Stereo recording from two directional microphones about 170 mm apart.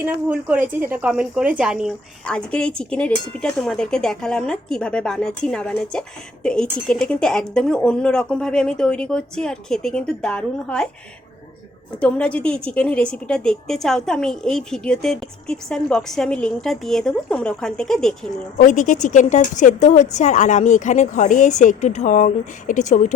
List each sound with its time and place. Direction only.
0.0 s a woman's voice: 10° right (ahead or behind)
11.9 s speech: 5° left (ahead or behind)
18.5 s speech: 50° left (ahead or behind)